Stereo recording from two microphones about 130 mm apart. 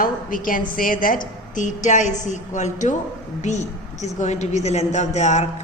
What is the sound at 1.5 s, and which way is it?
A woman's voice, 70° left (ahead or behind).